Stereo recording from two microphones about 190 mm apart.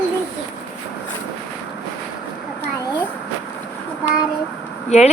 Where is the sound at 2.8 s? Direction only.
20° left (ahead or behind).